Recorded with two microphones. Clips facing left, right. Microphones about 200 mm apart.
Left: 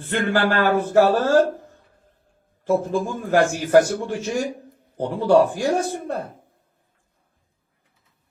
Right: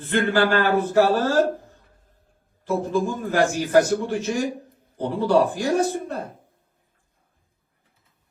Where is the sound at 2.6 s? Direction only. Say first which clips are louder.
Left 4 dB; 45° left (ahead or behind).